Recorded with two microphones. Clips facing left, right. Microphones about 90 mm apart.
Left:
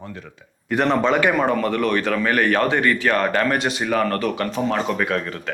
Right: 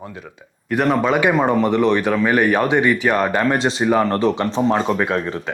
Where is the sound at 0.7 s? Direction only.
5° right (ahead or behind).